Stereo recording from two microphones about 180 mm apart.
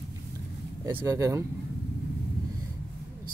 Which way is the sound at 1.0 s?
15° right (ahead or behind).